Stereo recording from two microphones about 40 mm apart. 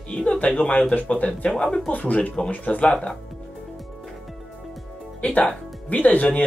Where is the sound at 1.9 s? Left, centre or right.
Left.